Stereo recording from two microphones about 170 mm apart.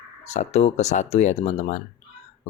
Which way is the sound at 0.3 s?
40° left (ahead or behind).